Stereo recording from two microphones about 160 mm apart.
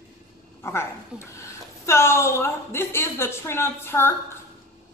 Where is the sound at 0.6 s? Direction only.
15° left (ahead or behind).